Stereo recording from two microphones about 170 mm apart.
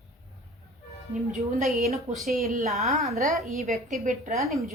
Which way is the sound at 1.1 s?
50° right (ahead or behind).